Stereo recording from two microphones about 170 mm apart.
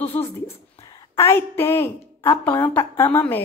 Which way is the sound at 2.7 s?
10° left (ahead or behind).